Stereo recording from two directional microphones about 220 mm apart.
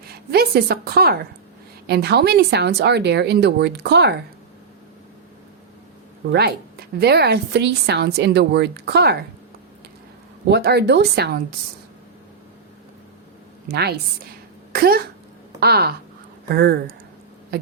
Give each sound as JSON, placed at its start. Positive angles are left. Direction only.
{"t": 0.0, "sound": "a woman's voice", "side_deg": -45}
{"t": 6.3, "sound": "a woman's voice", "side_deg": -45}
{"t": 10.5, "sound": "a woman's voice", "side_deg": -50}
{"t": 13.7, "sound": "a woman's voice", "side_deg": -45}